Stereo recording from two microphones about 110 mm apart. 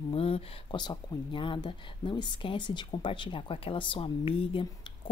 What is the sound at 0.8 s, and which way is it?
A woman's voice, 45° left (ahead or behind).